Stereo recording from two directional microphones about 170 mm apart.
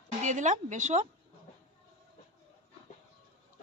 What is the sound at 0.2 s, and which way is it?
Speech, 45° right (ahead or behind).